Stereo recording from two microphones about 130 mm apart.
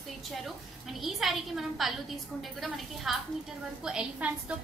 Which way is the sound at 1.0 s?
Centre (ahead or behind).